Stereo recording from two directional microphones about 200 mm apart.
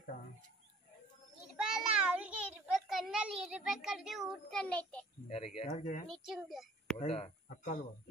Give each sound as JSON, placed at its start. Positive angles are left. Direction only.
{"t": 1.6, "sound": "child singing", "side_deg": -5}
{"t": 5.3, "sound": "speech", "side_deg": 30}
{"t": 6.0, "sound": "a child's voice", "side_deg": 0}
{"t": 7.0, "sound": "speech", "side_deg": 35}